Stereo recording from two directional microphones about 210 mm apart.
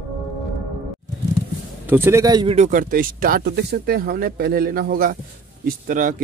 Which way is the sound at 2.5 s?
35° right (ahead or behind).